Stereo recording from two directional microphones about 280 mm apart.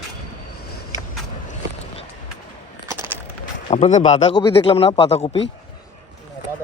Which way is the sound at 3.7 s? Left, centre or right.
Left.